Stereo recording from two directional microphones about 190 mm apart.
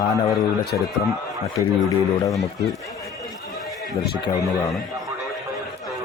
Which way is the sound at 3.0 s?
Centre (ahead or behind).